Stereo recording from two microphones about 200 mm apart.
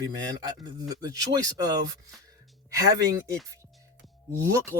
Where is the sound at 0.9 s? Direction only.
20° right (ahead or behind).